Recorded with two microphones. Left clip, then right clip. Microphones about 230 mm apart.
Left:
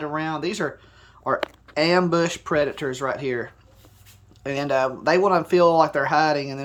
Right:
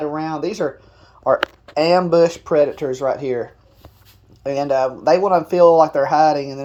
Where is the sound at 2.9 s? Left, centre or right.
Left.